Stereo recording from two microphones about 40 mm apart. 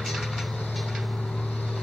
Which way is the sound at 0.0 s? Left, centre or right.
Centre.